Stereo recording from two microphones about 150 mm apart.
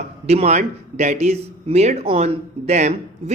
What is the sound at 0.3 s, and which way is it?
Speech, 45° right (ahead or behind).